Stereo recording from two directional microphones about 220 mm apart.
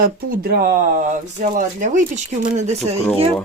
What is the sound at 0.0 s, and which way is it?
Speech, 40° right (ahead or behind).